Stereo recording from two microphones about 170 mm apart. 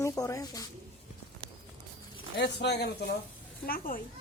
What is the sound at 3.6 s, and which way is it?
Speech, 55° left (ahead or behind).